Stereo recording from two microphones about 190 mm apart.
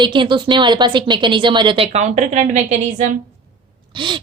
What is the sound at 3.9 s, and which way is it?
Speech, 25° right (ahead or behind).